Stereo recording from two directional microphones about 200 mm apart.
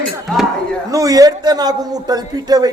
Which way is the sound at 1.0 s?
20° right (ahead or behind).